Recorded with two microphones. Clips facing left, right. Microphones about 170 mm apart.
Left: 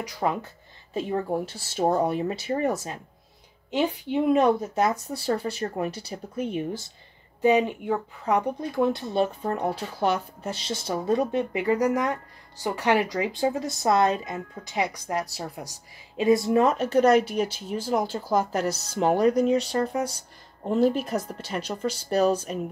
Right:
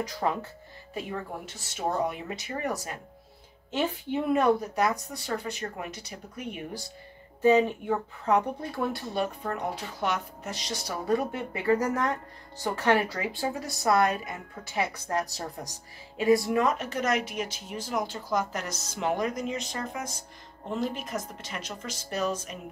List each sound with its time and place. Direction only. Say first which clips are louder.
0.0 s speech: left 2 dB; 15° left (ahead or behind)
0.9 s speech: left 8 dB; 30° left (ahead or behind)
7.4 s speech: left 1 dB; 15° left (ahead or behind)
16.2 s speech: left 3 dB; 20° left (ahead or behind)